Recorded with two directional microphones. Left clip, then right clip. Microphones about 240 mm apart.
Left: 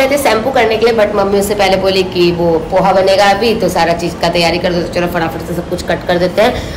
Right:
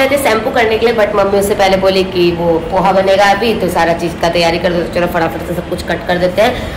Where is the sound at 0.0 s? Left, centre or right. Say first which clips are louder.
Even; centre.